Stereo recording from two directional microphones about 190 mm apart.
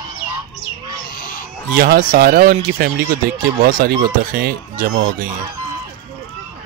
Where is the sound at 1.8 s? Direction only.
50° right (ahead or behind).